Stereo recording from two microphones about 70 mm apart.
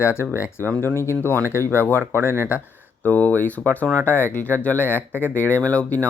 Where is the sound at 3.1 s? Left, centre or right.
Left.